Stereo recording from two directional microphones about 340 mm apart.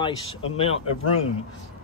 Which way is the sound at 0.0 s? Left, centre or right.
Centre.